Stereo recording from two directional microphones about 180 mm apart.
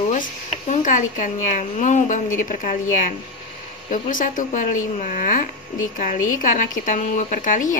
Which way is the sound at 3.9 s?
50° left (ahead or behind).